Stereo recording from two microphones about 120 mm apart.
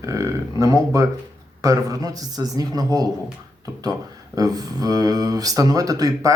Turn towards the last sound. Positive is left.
turn(degrees=-30)  # may be behind; listen again after turning